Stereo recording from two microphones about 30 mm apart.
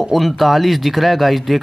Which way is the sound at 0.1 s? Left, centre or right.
Centre.